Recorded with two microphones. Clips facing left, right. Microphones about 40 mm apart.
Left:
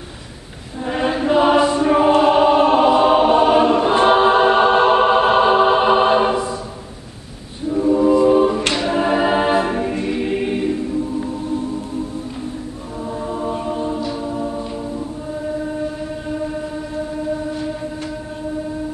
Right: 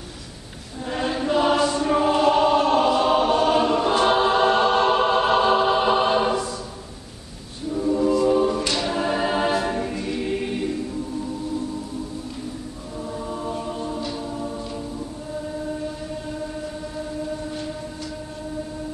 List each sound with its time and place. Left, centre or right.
0.8 s choir: left
7.7 s choir: left
9.9 s music: left
13.0 s choir: centre
16.3 s train: left